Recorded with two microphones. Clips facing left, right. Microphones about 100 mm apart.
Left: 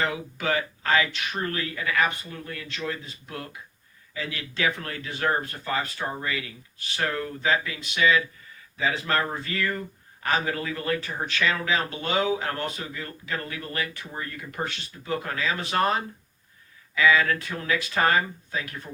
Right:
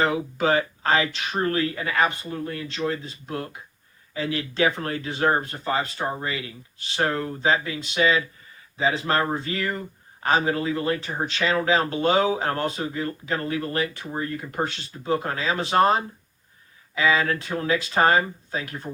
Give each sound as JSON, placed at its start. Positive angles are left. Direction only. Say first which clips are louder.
{"t": 0.0, "sound": "speech", "louder": "right 6 dB", "side_deg": -30}